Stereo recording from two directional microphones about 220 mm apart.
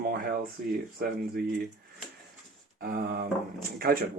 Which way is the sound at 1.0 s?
45° right (ahead or behind).